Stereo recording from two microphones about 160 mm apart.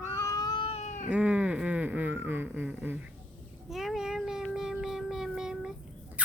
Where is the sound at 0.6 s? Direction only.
40° left (ahead or behind).